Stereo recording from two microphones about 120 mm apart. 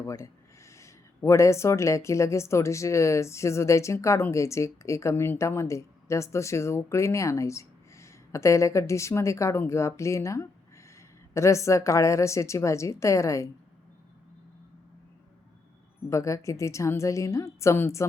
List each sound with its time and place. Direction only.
0.0 s speech: 25° left (ahead or behind)
16.0 s speech: 25° left (ahead or behind)